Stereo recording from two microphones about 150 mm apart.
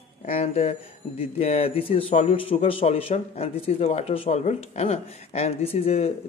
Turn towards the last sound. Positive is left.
turn(degrees=40)  # may be behind; listen again after turning